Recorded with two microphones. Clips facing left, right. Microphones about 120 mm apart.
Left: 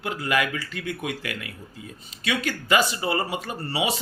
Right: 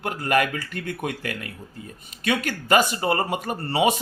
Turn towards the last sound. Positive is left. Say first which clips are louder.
# right 5 dB
turn(degrees=-50)  # may be behind; listen again after turning